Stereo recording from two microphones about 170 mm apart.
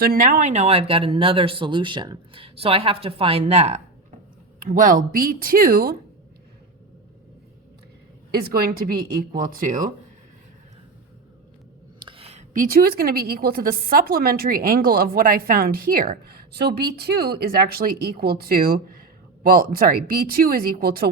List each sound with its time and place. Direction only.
0.0 s speech: 55° right (ahead or behind); by 3.8 s 40° right (ahead or behind)
4.6 s a woman's voice: 55° right (ahead or behind)
8.3 s a woman's voice: 65° right (ahead or behind)
11.9 s a sound: 30° right (ahead or behind)
12.6 s a woman's voice: 60° right (ahead or behind)